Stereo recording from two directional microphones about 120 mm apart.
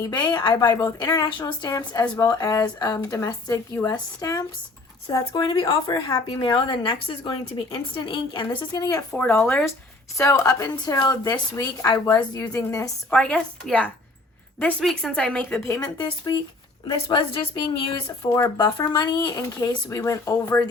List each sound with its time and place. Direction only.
0.1 s a woman's voice: 40° left (ahead or behind)
6.2 s a woman's voice: 40° left (ahead or behind)
9.1 s a woman's voice: 15° left (ahead or behind)
13.1 s speech: 10° left (ahead or behind)
16.0 s a woman's voice: 35° left (ahead or behind)
18.3 s speech: 30° left (ahead or behind)